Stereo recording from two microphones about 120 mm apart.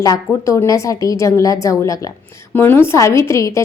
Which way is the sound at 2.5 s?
15° left (ahead or behind).